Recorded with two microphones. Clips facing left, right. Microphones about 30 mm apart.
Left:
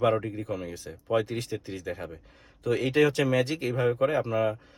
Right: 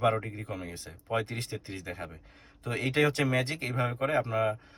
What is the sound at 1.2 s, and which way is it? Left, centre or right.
Speech, right.